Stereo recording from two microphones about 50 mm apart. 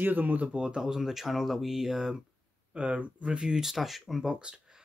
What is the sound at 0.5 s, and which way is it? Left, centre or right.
Speech, centre.